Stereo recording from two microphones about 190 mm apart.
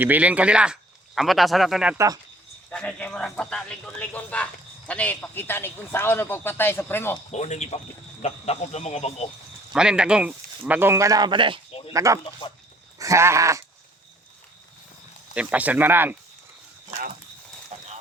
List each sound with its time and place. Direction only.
0.0 s speech: 10° right (ahead or behind)
2.6 s a man's voice: 5° left (ahead or behind)
7.3 s speech: 35° left (ahead or behind)
9.7 s speech: 5° right (ahead or behind); by 11.6 s 25° right (ahead or behind)
11.7 s a sound: 30° left (ahead or behind)
11.9 s speech: 15° right (ahead or behind)
15.4 s speech: 5° right (ahead or behind)
17.7 s a sound: 35° right (ahead or behind)